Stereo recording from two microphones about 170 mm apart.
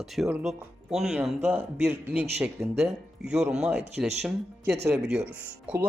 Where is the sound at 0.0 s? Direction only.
Centre (ahead or behind).